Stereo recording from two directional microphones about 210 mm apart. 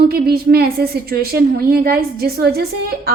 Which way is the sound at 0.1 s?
45° right (ahead or behind).